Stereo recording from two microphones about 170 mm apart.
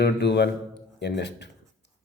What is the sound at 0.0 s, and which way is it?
A man's voice, 85° left.